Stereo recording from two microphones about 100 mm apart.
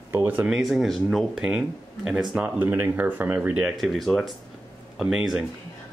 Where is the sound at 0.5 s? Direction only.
Centre (ahead or behind); by 3.7 s 15° right (ahead or behind).